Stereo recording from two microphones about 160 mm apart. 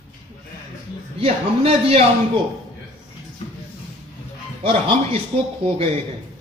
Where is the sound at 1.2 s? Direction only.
35° right (ahead or behind).